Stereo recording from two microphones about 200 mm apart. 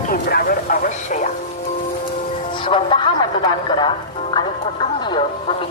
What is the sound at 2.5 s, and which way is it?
Speech, 25° left (ahead or behind).